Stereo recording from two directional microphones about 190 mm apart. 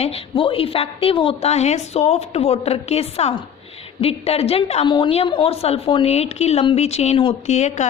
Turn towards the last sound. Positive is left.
turn(degrees=35)  # may be behind; listen again after turning